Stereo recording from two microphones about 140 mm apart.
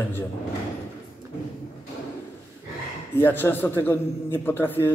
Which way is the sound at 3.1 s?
15° left (ahead or behind).